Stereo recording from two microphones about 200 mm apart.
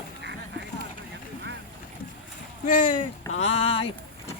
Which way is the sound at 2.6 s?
45° left (ahead or behind).